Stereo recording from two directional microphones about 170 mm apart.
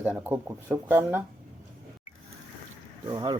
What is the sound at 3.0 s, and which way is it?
Speech, 25° right (ahead or behind).